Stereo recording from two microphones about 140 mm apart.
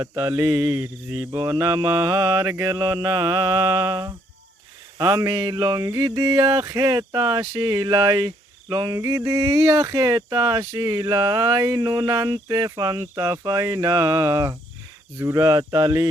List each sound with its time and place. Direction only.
0.0 s mantra: 20° right (ahead or behind)
1.3 s speech: 25° right (ahead or behind)